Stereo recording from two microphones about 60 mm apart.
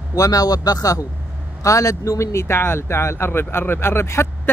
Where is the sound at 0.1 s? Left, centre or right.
Left.